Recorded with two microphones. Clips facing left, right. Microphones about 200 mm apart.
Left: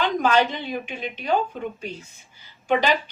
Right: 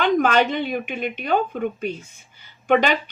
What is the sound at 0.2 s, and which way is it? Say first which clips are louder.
Speech: right 2 dB; 60° right (ahead or behind).